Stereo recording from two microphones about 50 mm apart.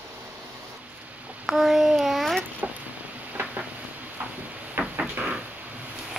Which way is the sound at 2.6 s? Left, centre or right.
Right.